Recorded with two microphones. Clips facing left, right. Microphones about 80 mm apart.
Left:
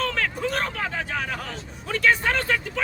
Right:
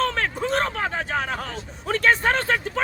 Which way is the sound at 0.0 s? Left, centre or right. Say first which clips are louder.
Right 2 dB; right.